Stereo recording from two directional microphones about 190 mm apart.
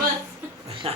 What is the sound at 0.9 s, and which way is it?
Speech, 30° right (ahead or behind).